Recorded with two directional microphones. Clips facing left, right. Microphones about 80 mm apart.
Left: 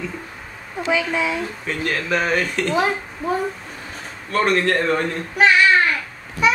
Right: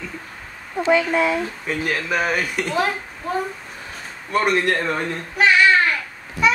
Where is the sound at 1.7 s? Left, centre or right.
Centre.